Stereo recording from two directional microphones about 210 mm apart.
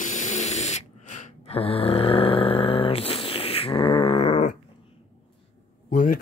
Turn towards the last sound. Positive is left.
turn(degrees=40)  # may be behind; listen again after turning